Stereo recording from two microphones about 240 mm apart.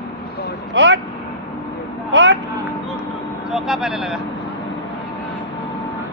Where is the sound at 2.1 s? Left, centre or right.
Right.